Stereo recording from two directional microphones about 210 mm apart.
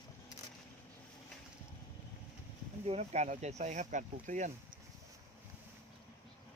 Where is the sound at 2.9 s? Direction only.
30° right (ahead or behind).